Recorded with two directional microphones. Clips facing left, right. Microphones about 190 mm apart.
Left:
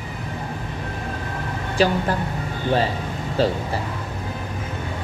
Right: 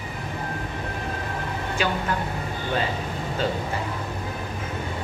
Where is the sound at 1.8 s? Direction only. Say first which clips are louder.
Left 7 dB; 35° left (ahead or behind).